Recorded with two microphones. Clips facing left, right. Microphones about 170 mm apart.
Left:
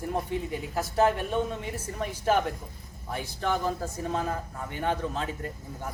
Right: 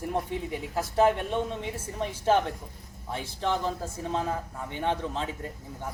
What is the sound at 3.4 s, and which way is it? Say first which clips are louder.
Speech: even; 5° left (ahead or behind).